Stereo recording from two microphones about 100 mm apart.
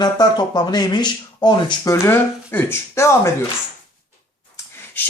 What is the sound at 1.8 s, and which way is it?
Speech, 30° left (ahead or behind).